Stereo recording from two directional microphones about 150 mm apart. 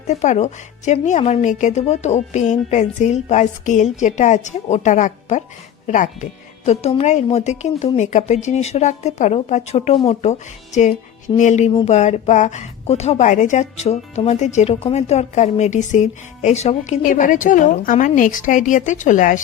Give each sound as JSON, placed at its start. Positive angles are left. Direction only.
{"t": 0.1, "sound": "a woman's voice", "side_deg": 50}
{"t": 6.7, "sound": "a woman's voice", "side_deg": 45}